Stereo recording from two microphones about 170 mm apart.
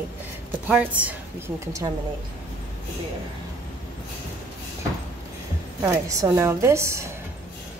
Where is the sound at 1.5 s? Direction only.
20° right (ahead or behind).